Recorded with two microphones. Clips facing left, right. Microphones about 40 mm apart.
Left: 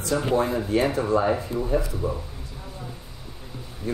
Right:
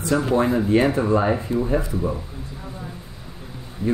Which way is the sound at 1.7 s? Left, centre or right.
Right.